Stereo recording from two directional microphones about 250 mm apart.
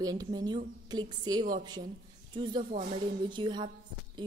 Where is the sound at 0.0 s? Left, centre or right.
Centre.